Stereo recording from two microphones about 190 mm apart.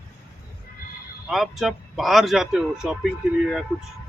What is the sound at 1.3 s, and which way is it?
Speech, centre (ahead or behind).